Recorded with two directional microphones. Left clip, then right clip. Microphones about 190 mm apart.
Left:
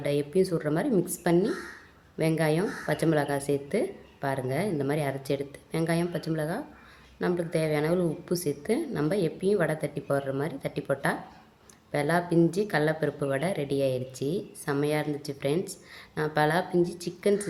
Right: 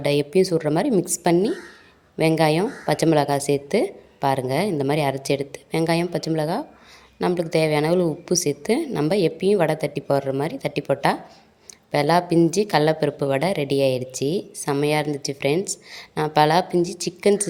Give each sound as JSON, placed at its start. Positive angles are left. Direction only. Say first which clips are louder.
{"t": 0.0, "sound": "a woman's voice", "louder": "right 7 dB", "side_deg": -25}